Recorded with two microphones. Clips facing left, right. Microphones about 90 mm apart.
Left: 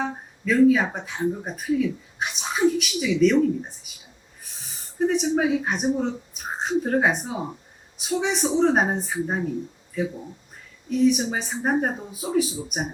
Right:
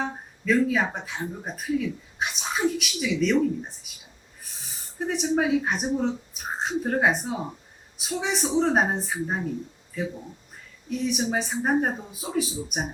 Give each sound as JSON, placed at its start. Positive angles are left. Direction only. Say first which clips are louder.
{"t": 0.0, "sound": "speech", "louder": "left 2 dB", "side_deg": 0}